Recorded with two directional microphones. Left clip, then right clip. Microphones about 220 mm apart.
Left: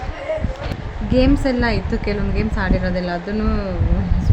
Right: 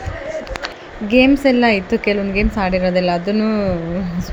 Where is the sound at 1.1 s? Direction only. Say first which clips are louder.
Right 5 dB; 10° right (ahead or behind).